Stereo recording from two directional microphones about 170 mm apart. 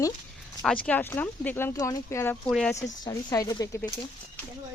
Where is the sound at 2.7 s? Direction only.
20° left (ahead or behind).